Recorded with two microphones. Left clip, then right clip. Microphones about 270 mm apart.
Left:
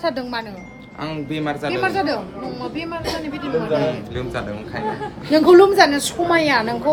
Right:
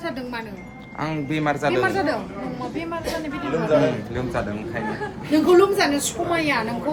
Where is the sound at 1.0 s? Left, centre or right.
Right.